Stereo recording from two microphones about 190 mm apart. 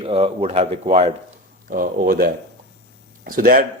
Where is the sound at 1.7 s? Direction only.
50° right (ahead or behind).